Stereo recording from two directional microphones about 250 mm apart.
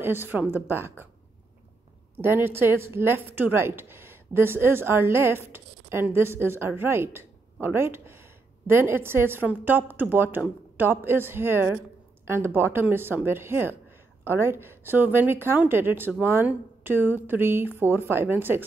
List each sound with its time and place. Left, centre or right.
0.0 s speech: centre
2.1 s a woman's voice: centre